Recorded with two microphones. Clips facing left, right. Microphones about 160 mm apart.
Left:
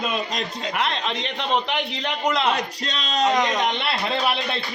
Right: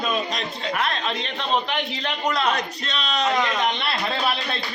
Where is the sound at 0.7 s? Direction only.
20° left (ahead or behind).